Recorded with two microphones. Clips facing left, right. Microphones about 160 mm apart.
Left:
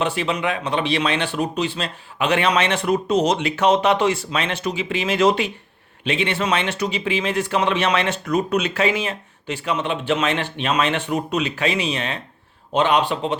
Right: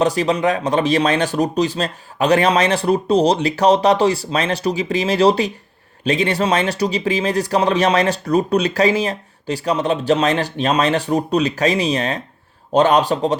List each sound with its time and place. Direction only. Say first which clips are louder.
0.0 s speech: right 6 dB; 40° right (ahead or behind)